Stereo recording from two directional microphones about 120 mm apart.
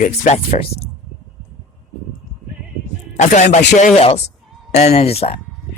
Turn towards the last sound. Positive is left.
turn(degrees=55)  # may be behind; listen again after turning